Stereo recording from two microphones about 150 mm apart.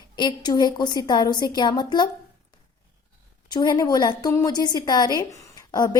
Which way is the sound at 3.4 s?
30° left (ahead or behind).